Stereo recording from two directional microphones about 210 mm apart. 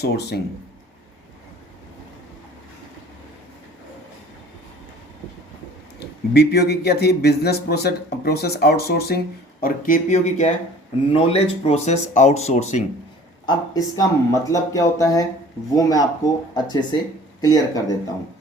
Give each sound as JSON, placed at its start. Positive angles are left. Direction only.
{"t": 0.0, "sound": "speech", "side_deg": 50}
{"t": 6.3, "sound": "speech", "side_deg": 50}
{"t": 13.4, "sound": "speech", "side_deg": 20}